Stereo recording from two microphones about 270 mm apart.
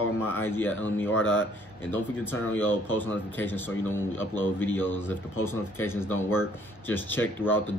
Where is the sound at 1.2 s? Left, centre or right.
Left.